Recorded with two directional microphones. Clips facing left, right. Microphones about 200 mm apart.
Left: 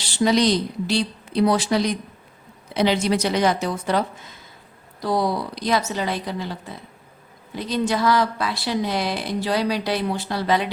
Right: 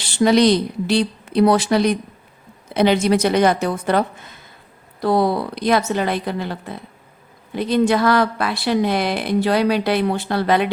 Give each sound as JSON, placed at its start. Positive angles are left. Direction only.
{"t": 0.0, "sound": "a woman's voice", "side_deg": -60}